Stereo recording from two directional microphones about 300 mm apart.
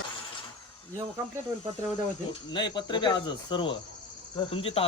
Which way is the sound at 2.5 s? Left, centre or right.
Centre.